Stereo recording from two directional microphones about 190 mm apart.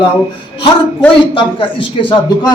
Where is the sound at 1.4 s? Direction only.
25° left (ahead or behind).